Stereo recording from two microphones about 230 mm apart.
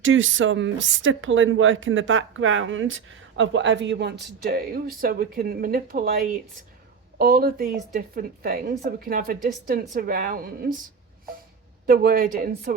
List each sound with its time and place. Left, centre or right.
0.0 s a woman's voice: right
7.2 s a woman's voice: right
11.9 s a woman's voice: right